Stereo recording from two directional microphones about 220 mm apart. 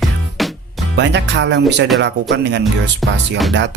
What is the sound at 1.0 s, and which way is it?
Music, 50° right (ahead or behind).